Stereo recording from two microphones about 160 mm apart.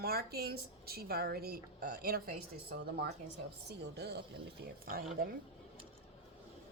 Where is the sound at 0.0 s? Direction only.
75° right (ahead or behind).